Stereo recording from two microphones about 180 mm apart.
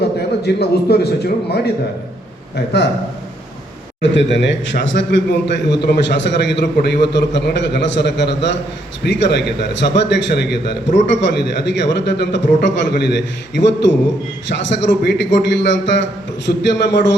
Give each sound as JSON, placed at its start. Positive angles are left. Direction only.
{"t": 0.2, "sound": "a man's voice", "side_deg": 65}
{"t": 2.7, "sound": "a man's voice", "side_deg": 70}
{"t": 4.0, "sound": "a man's voice", "side_deg": 85}